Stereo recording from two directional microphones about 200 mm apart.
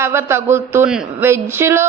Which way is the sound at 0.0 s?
10° right (ahead or behind).